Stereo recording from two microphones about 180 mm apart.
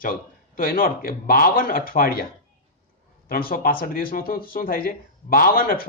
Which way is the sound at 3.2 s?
55° left (ahead or behind).